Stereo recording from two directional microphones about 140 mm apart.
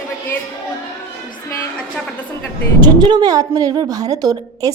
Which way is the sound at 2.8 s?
30° right (ahead or behind).